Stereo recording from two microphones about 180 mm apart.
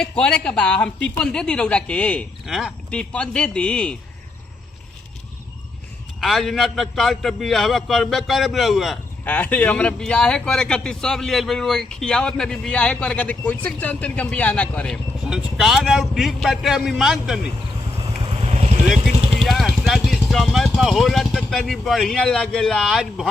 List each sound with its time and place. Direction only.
0.0 s a man's voice: 5° left (ahead or behind)
6.1 s a man's voice: centre (ahead or behind)
15.3 s a man's voice: 5° right (ahead or behind)
17.9 s vehicle: 30° right (ahead or behind)
18.9 s speech: centre (ahead or behind)